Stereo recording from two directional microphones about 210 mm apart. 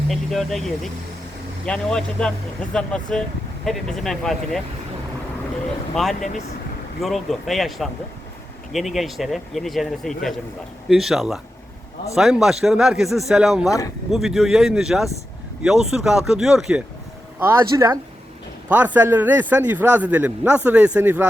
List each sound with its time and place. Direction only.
0.1 s speech: centre (ahead or behind)
1.6 s speech: 5° left (ahead or behind)
5.9 s speech: centre (ahead or behind)
6.1 s speech: 35° left (ahead or behind)
7.0 s speech: centre (ahead or behind)
13.7 s speech: 15° left (ahead or behind)
14.1 s speech: centre (ahead or behind)
17.4 s a man's voice: 15° right (ahead or behind)